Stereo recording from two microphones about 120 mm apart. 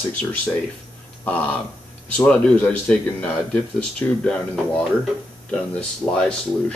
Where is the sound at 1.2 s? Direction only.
15° left (ahead or behind).